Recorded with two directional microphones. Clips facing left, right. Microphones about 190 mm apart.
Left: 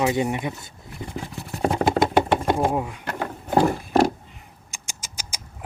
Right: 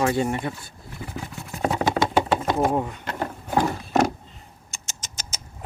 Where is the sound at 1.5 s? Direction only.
Centre (ahead or behind).